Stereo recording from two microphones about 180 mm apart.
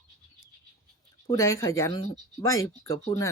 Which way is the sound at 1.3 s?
15° left (ahead or behind).